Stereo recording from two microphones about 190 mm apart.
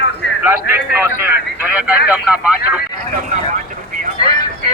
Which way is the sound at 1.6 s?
5° right (ahead or behind).